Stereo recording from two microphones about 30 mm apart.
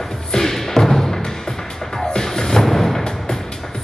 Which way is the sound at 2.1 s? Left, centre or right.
Centre.